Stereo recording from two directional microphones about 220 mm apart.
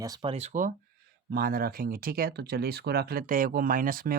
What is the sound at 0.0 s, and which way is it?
Speech, 20° right (ahead or behind).